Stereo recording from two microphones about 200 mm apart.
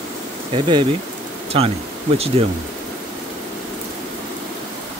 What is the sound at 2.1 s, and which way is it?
Speech, 30° right (ahead or behind).